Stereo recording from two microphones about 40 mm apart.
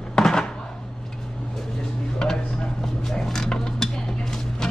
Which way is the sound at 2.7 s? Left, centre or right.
Centre.